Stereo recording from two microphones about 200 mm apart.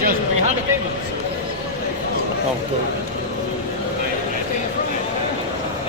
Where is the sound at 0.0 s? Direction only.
45° right (ahead or behind).